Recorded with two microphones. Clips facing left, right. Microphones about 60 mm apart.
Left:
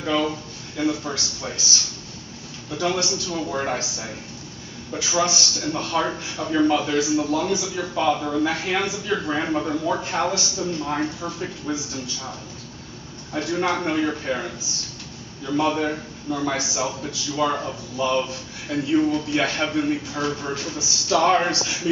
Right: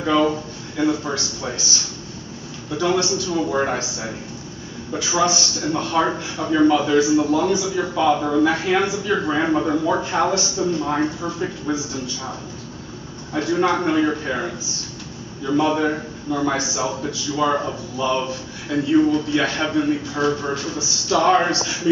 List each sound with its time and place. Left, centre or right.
0.0 s a man's voice: right